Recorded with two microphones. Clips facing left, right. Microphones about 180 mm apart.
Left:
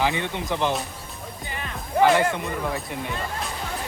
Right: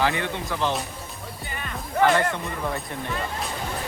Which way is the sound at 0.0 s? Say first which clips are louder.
Even; 20° left (ahead or behind).